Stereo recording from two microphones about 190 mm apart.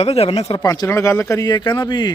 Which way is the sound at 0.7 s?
15° left (ahead or behind).